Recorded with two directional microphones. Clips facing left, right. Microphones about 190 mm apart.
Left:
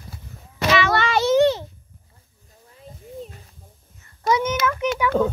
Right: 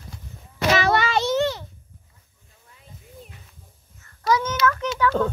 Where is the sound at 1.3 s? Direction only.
20° left (ahead or behind).